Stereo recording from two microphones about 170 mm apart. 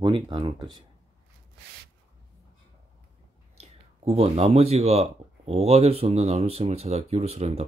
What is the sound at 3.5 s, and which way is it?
Speech, 40° right (ahead or behind).